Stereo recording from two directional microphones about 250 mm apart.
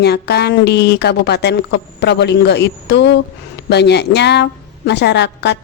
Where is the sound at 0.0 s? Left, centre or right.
Left.